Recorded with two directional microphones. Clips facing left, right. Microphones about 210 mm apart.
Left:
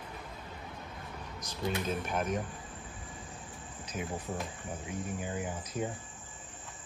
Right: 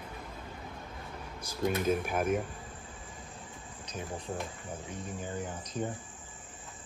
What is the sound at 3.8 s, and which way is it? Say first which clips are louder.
Cricket: left 2 dB; 5° left (ahead or behind).